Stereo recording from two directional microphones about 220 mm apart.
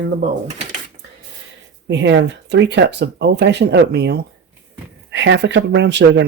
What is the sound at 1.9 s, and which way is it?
Speech, 55° right (ahead or behind).